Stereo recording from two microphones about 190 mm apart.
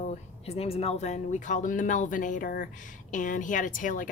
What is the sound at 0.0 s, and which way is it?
Speech, 35° left (ahead or behind).